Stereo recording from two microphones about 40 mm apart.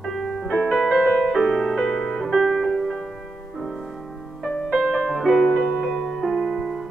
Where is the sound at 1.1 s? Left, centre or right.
Centre.